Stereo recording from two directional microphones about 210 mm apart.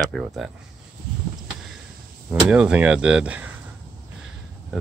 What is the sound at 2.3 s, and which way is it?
Speech, 5° right (ahead or behind).